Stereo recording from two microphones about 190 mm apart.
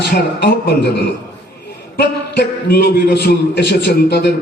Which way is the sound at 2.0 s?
60° left (ahead or behind).